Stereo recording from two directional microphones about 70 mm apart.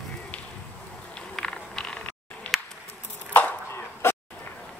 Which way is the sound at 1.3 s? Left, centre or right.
Centre.